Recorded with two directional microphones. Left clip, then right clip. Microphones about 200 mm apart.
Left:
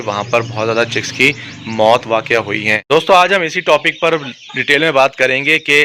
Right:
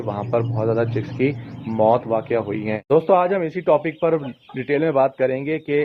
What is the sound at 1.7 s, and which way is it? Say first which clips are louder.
Speech: left 6 dB; 30° left (ahead or behind).